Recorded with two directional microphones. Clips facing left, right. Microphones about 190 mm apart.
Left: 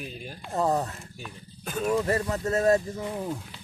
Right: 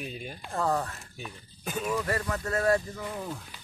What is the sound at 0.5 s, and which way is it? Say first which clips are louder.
Speech: left 3 dB; 20° left (ahead or behind).